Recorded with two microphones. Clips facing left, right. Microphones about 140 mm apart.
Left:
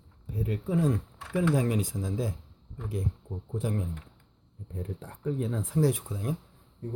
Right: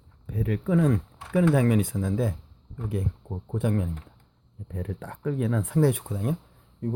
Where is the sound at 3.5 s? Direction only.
65° right (ahead or behind).